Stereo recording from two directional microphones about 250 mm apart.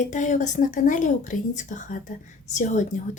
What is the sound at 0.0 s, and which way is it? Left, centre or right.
A woman's voice, left.